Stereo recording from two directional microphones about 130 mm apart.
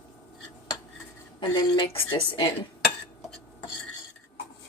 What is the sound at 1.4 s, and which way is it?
A woman's voice, 35° left (ahead or behind).